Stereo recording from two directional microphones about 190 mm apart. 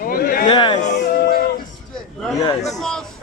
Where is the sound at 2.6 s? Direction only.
Centre (ahead or behind).